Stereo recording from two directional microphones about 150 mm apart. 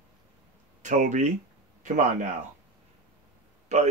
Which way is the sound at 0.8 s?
55° right (ahead or behind).